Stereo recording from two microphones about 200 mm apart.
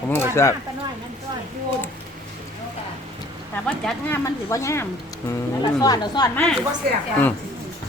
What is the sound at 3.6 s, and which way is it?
Speech, 10° left (ahead or behind).